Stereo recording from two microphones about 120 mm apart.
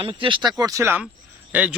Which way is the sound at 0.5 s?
30° right (ahead or behind).